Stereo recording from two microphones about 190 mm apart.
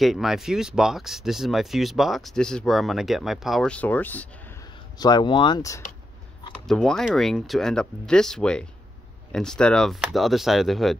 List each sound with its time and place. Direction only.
0.0 s speech: centre (ahead or behind)
4.9 s speech: 20° left (ahead or behind)
6.7 s speech: 5° left (ahead or behind)